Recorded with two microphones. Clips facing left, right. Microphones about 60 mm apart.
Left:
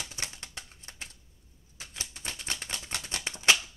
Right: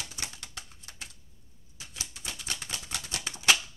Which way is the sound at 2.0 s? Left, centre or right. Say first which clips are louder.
Left 1 dB; left.